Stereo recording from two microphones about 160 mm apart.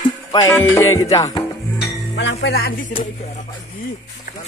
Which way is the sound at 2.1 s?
90° left.